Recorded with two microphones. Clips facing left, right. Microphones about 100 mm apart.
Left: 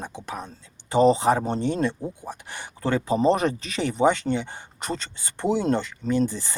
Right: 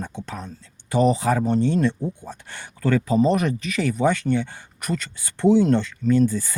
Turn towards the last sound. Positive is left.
turn(degrees=20)  # may be behind; listen again after turning